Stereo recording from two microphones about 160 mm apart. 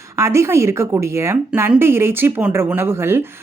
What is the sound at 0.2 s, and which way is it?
Speech, 15° right (ahead or behind).